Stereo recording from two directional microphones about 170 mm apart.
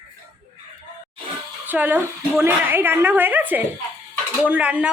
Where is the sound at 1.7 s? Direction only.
10° right (ahead or behind).